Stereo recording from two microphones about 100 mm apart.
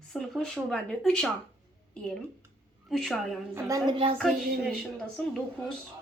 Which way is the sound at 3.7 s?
35° right (ahead or behind).